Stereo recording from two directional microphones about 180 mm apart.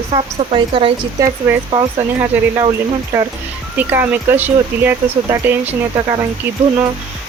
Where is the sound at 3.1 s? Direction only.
15° right (ahead or behind).